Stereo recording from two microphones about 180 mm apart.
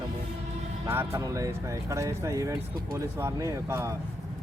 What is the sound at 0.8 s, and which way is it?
Speech, 15° right (ahead or behind).